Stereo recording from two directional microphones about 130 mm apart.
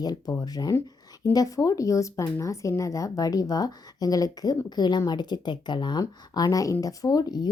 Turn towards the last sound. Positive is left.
turn(degrees=30)  # may be behind; listen again after turning